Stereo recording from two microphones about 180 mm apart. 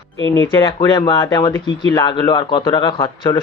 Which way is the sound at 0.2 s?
15° left (ahead or behind).